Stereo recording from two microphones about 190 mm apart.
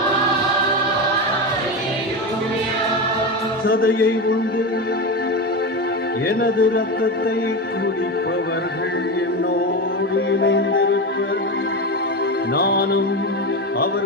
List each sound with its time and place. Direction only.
3.8 s a sound: 90° left
6.2 s music: 55° left (ahead or behind)
10.4 s music: 90° left
12.5 s music: 55° left (ahead or behind)